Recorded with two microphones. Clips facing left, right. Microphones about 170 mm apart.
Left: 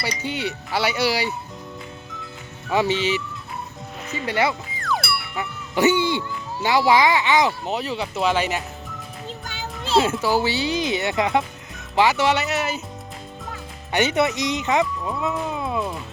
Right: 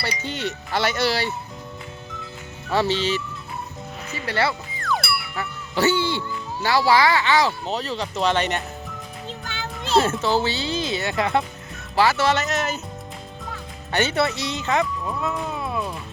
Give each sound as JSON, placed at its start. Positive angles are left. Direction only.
{"t": 0.2, "sound": "speech", "side_deg": 10}
{"t": 2.6, "sound": "speech", "side_deg": 15}
{"t": 4.3, "sound": "speech", "side_deg": 15}
{"t": 4.8, "sound": "music", "side_deg": 0}
{"t": 5.4, "sound": "speech", "side_deg": 20}
{"t": 9.4, "sound": "music", "side_deg": 10}
{"t": 10.1, "sound": "speech", "side_deg": 10}
{"t": 13.9, "sound": "speech", "side_deg": 15}
{"t": 15.4, "sound": "music", "side_deg": 15}